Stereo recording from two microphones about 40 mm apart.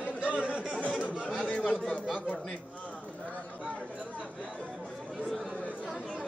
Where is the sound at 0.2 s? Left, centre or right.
Right.